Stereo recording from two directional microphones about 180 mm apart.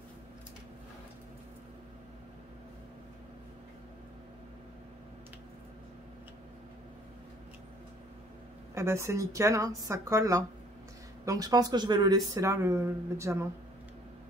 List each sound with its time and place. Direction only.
8.7 s speech: 15° right (ahead or behind)